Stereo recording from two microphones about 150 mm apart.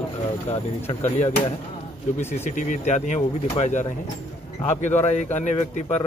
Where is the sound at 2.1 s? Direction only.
50° left (ahead or behind).